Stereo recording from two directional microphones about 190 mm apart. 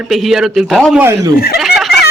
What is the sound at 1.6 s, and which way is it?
Fowl, centre (ahead or behind).